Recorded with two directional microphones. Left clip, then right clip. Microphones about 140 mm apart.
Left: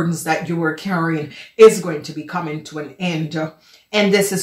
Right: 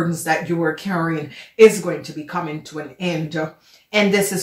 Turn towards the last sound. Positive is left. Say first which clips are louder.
# left 1 dB
turn(degrees=35)  # may be behind; listen again after turning